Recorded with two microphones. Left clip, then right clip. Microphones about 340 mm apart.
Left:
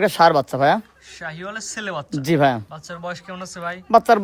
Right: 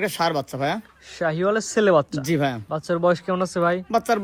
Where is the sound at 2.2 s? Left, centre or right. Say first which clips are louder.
Left 6 dB; left.